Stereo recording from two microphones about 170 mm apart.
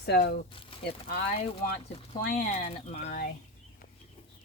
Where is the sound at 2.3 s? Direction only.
45° left (ahead or behind).